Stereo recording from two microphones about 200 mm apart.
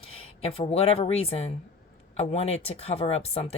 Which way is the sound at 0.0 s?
30° left (ahead or behind).